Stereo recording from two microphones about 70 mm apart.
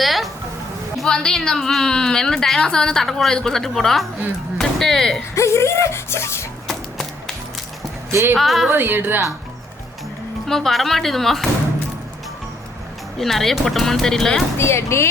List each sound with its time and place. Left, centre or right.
0.0 s music: centre
0.9 s a woman's voice: centre
5.3 s speech: left
6.7 s a sound: centre
8.1 s a woman's voice: right
8.4 s speech: centre
8.7 s a woman's voice: right
10.5 s speech: centre
13.1 s speech: centre
14.6 s speech: left